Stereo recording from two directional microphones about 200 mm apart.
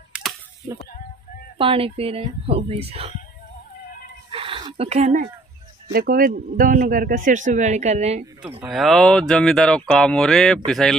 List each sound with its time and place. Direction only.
1.6 s speech: 25° right (ahead or behind)
4.3 s a sound: 25° right (ahead or behind)
5.9 s speech: 45° right (ahead or behind)
8.5 s speech: 5° right (ahead or behind)